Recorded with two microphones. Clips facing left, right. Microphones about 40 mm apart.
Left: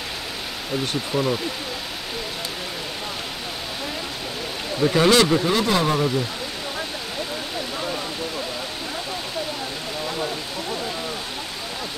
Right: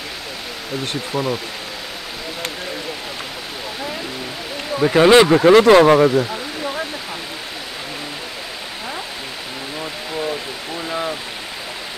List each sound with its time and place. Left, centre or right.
1.1 s speech: centre
4.7 s speech: right
5.4 s speech: right